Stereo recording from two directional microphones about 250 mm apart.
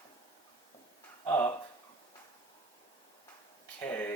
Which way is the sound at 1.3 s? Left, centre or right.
Centre.